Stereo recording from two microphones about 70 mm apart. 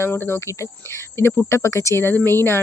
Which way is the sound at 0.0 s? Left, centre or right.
Left.